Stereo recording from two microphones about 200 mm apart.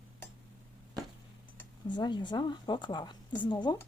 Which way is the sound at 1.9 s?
20° left (ahead or behind).